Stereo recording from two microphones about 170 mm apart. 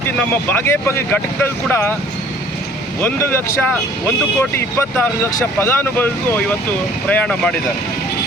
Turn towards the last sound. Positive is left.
turn(degrees=5)  # may be behind; listen again after turning